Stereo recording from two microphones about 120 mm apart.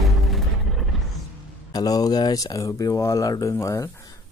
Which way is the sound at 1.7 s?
35° left (ahead or behind).